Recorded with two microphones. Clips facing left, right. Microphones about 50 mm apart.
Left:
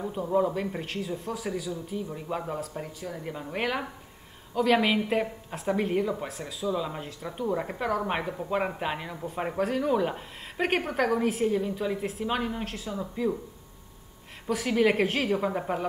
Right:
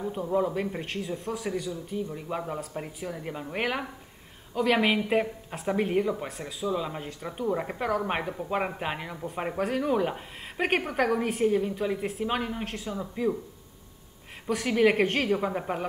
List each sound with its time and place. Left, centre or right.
0.2 s speech: centre
2.1 s speech: centre
2.7 s speech: centre
14.5 s speech: centre